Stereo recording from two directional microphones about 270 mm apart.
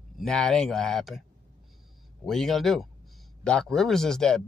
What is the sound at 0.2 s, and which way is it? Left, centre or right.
Speech, centre.